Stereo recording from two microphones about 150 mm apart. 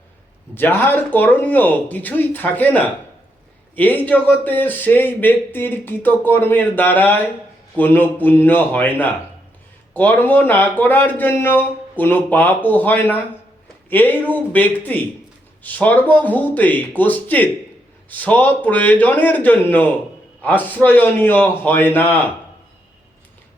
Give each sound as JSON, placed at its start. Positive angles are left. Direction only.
{"t": 0.5, "sound": "speech", "side_deg": 15}